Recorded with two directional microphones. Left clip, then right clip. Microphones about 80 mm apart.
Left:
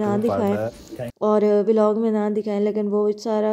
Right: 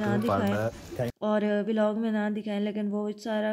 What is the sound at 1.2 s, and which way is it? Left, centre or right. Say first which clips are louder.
A woman's voice: left 11 dB; left.